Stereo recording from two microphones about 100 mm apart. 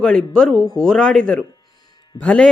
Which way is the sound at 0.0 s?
5° left (ahead or behind).